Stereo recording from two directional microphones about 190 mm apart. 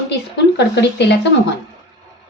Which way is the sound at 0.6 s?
65° left (ahead or behind).